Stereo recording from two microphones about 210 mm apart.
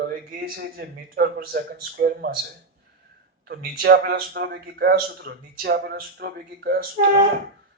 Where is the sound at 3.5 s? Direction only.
50° right (ahead or behind).